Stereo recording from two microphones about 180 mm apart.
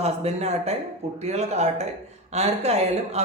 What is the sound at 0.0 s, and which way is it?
Speech, 35° right (ahead or behind).